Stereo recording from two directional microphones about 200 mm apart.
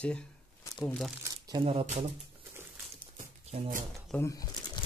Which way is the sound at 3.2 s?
35° right (ahead or behind).